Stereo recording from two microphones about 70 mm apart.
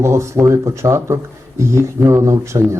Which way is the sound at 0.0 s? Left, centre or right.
Right.